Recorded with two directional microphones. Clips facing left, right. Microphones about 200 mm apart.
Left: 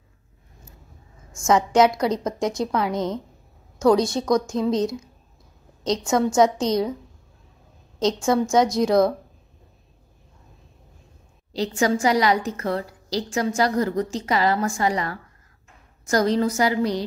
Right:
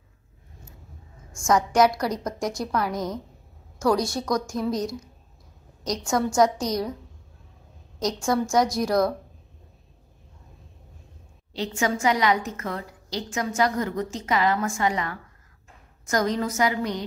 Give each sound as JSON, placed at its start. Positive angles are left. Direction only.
{"t": 1.4, "sound": "a woman's voice", "side_deg": 25}
{"t": 8.3, "sound": "a woman's voice", "side_deg": 20}
{"t": 11.5, "sound": "a woman's voice", "side_deg": 35}